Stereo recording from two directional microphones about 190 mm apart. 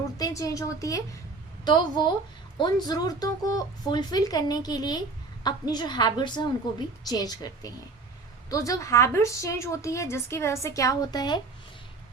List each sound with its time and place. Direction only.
0.2 s a woman's voice: 15° left (ahead or behind)